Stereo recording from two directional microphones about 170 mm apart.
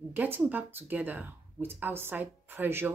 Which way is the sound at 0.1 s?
10° right (ahead or behind).